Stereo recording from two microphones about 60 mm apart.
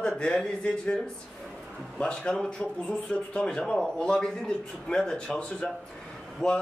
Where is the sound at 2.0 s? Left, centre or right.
Centre.